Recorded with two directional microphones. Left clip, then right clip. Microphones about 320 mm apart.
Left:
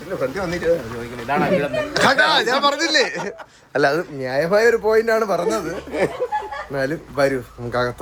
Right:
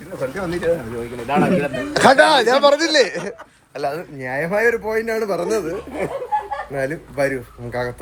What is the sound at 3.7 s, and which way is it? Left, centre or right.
Speech, left.